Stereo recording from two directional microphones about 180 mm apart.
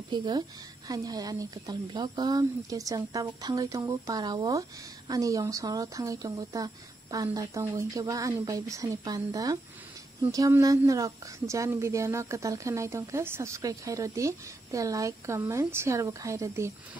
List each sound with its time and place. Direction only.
0.1 s speech: 25° right (ahead or behind)